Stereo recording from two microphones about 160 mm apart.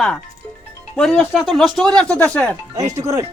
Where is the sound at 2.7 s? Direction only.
20° right (ahead or behind).